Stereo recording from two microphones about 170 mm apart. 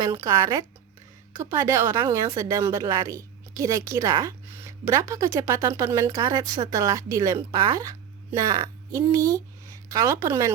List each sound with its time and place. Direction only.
0.0 s a woman's voice: 20° right (ahead or behind)